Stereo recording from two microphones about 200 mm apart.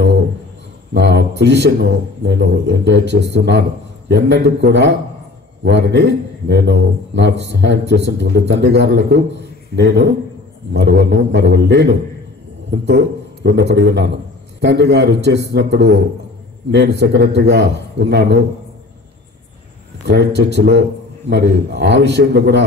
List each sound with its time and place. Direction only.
0.9 s a man's voice: 60° right (ahead or behind)
20.1 s a man's voice: 60° right (ahead or behind)